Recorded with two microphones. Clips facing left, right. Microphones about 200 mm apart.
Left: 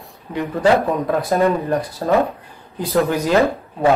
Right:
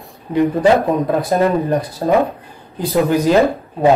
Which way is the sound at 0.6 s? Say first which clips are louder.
Left 1 dB; 15° right (ahead or behind).